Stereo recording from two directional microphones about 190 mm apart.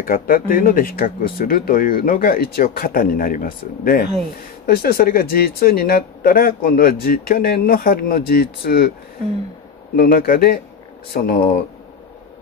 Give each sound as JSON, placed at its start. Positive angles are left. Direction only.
{"t": 0.0, "sound": "speech", "side_deg": 50}
{"t": 9.9, "sound": "speech", "side_deg": 50}